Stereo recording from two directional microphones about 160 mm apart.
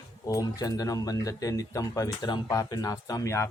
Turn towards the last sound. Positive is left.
turn(degrees=20)  # may be behind; listen again after turning